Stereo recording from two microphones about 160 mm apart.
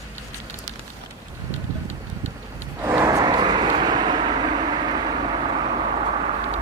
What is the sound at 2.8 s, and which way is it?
Vehicle, 20° right (ahead or behind).